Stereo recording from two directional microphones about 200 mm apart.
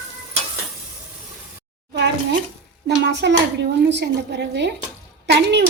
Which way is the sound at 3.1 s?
60° right (ahead or behind).